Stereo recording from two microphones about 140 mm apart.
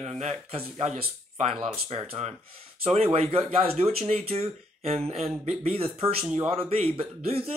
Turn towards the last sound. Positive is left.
turn(degrees=-45)  # may be behind; listen again after turning